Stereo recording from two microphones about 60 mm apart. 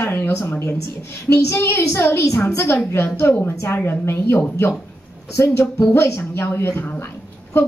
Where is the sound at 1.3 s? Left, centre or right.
Left.